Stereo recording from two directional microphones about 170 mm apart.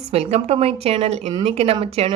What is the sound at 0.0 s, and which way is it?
Speech, 35° right (ahead or behind).